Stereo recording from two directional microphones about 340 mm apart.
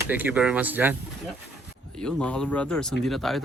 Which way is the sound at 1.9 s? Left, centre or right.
Centre.